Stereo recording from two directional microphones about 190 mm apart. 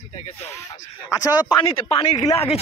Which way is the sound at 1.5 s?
20° left (ahead or behind).